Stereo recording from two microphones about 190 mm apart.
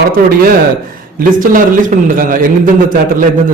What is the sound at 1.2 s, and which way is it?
A man's voice, 45° right (ahead or behind).